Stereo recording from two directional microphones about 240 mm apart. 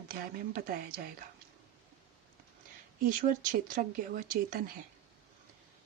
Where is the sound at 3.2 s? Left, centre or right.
Right.